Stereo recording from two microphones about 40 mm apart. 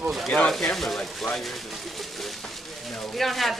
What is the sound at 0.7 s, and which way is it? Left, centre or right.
Speech, centre.